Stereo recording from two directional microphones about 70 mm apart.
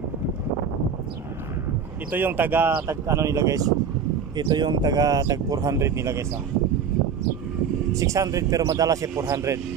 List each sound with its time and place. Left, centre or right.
2.0 s speech: right
2.9 s speech: right
4.4 s speech: right
7.9 s speech: right